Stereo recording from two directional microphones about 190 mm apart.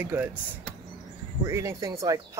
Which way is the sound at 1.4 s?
15° right (ahead or behind).